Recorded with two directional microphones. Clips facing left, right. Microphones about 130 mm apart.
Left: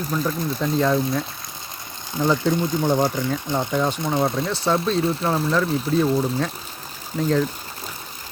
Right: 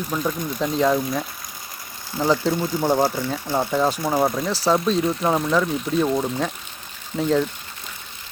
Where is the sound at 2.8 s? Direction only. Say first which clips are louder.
Right 3 dB; 10° right (ahead or behind).